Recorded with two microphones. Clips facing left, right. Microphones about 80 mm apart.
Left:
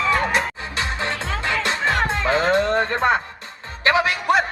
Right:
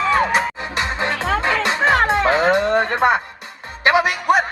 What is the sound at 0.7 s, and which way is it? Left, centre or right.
Music, right.